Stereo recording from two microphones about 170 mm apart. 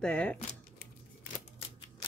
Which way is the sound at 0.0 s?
5° left (ahead or behind).